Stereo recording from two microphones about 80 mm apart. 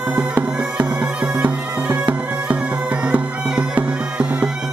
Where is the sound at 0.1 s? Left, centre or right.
Centre.